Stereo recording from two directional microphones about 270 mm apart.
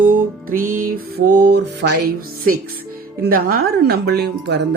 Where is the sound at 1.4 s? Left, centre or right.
Right.